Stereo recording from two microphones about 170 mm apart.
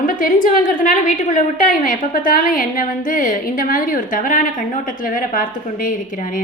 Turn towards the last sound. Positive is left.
turn(degrees=55)  # may be behind; listen again after turning